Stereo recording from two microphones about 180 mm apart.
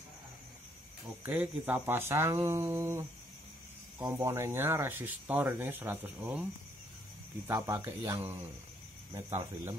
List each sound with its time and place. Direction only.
1.2 s speech: 10° right (ahead or behind)
4.1 s speech: 15° right (ahead or behind)
7.4 s speech: 20° right (ahead or behind)